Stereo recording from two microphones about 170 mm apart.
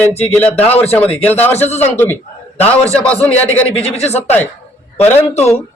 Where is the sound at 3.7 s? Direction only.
40° left (ahead or behind).